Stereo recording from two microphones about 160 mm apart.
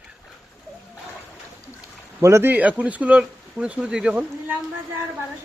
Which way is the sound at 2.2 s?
15° right (ahead or behind).